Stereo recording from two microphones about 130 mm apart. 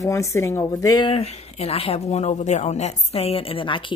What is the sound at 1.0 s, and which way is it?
Speech, 50° left (ahead or behind).